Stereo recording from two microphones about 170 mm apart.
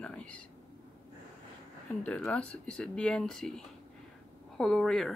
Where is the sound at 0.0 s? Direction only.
5° left (ahead or behind).